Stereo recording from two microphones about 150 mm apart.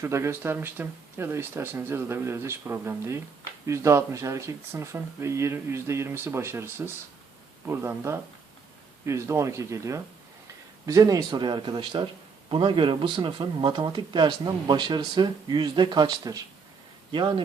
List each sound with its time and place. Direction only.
0.0 s speech: 20° right (ahead or behind)